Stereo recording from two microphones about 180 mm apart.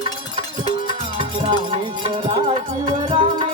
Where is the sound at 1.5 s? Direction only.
25° right (ahead or behind).